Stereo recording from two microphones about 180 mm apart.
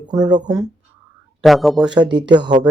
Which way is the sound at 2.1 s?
25° right (ahead or behind).